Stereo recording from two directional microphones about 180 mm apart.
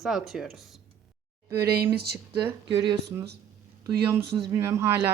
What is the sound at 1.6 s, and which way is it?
Speech, 60° right (ahead or behind).